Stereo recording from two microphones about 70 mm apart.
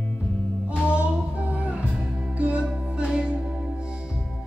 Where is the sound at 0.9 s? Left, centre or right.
Centre.